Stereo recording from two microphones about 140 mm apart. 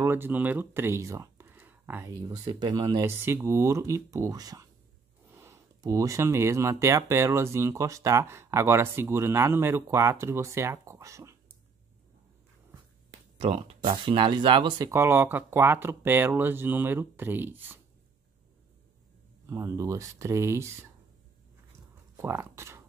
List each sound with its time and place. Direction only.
0.0 s speech: 15° right (ahead or behind)
2.0 s speech: 25° right (ahead or behind)
13.4 s speech: 40° right (ahead or behind)
14.9 s speech: 15° right (ahead or behind)
19.4 s speech: 20° right (ahead or behind)
22.1 s speech: 20° right (ahead or behind)